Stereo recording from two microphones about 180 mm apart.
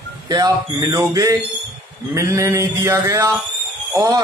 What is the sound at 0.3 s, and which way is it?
Speech, 20° right (ahead or behind).